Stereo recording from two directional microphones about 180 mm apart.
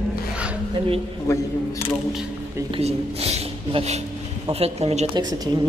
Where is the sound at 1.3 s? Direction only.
15° left (ahead or behind).